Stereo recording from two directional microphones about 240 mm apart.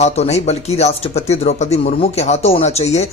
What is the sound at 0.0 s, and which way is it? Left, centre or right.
Speech, left.